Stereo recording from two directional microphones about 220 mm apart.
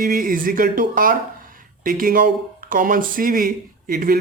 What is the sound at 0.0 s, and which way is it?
Speech, 40° right (ahead or behind).